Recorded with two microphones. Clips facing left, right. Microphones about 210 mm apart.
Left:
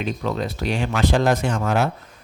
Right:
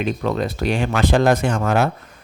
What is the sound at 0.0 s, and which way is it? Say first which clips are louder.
Speech: right 3 dB; 55° right (ahead or behind).